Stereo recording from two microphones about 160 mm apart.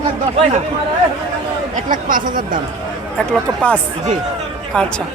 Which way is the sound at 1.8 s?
55° right (ahead or behind).